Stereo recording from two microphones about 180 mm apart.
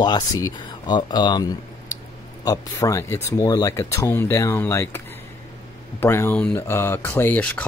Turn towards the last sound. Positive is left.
turn(degrees=10)  # may be behind; listen again after turning